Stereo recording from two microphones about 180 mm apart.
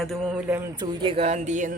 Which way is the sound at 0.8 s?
30° right (ahead or behind).